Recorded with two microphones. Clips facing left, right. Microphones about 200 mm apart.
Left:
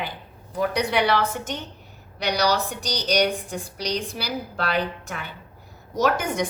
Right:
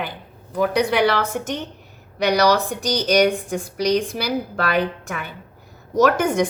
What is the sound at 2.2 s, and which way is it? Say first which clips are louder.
A woman's voice: right 6 dB; 50° right (ahead or behind).